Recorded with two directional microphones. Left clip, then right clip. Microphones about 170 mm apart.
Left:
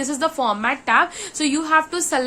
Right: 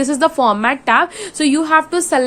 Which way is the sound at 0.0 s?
40° right (ahead or behind).